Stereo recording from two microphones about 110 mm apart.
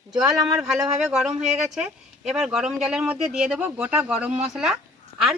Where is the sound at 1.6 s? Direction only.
5° right (ahead or behind).